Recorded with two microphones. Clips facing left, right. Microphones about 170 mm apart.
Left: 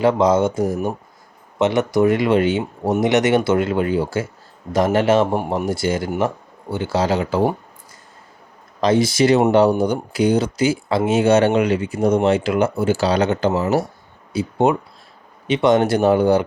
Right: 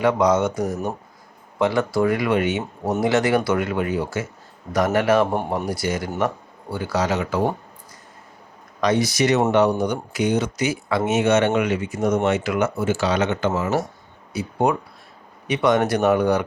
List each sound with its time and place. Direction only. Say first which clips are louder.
0.0 s speech: left 3 dB; 30° left (ahead or behind)
0.6 s speech: left 4 dB; centre (ahead or behind)
1.5 s speech: left 3 dB; 20° left (ahead or behind)
3.0 s speech: left 3 dB; 20° left (ahead or behind)
8.8 s speech: left 4 dB; 25° left (ahead or behind)
14.3 s speech: left 4 dB; 25° left (ahead or behind)